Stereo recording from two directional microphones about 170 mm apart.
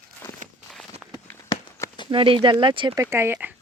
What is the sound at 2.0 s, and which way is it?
Speech, 30° right (ahead or behind).